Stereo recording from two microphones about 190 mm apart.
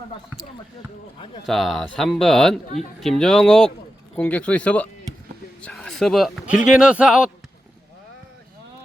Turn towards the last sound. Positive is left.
turn(degrees=-5)  # may be behind; listen again after turning